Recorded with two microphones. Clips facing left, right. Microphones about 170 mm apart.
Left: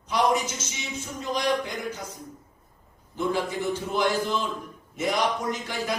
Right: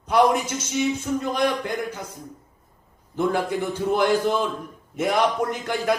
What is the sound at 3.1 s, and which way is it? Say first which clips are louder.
A man's voice: right 4 dB; 55° right (ahead or behind).